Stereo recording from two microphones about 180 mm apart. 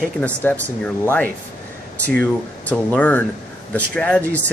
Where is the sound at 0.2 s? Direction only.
10° left (ahead or behind).